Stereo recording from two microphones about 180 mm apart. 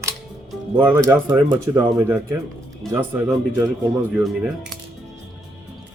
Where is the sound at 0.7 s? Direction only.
10° right (ahead or behind).